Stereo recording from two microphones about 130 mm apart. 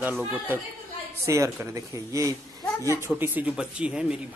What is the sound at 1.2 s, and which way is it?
Speech, 25° right (ahead or behind).